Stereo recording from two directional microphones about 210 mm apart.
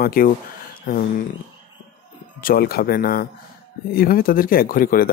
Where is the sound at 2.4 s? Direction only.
45° left (ahead or behind).